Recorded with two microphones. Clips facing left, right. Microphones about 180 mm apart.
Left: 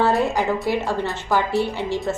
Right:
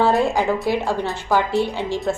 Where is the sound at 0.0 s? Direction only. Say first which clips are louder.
Right 2 dB; 15° right (ahead or behind).